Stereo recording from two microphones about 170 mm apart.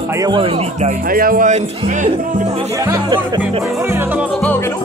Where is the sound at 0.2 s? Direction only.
25° right (ahead or behind).